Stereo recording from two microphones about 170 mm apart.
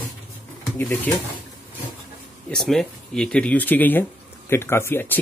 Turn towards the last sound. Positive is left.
turn(degrees=10)  # may be behind; listen again after turning